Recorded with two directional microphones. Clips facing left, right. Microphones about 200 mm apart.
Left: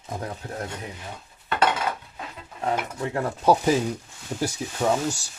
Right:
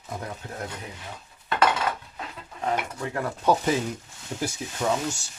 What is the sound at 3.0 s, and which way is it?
Dishes, 30° left (ahead or behind).